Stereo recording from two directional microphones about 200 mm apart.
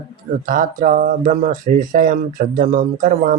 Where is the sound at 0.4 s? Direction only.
45° right (ahead or behind).